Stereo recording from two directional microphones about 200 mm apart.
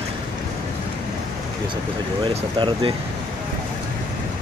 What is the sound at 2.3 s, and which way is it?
Speech, 25° right (ahead or behind).